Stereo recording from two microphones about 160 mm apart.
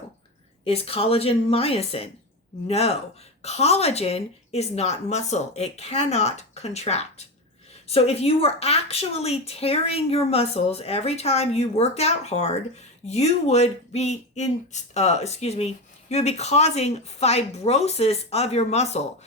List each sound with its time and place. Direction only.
0.6 s a woman's voice: 40° left (ahead or behind)